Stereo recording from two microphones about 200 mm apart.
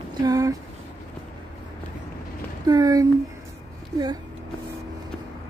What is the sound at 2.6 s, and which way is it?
Speech, 20° right (ahead or behind).